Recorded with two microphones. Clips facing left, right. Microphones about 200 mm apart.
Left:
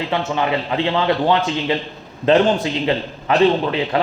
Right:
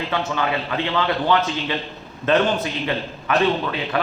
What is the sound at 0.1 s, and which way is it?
A man's voice, 25° left (ahead or behind).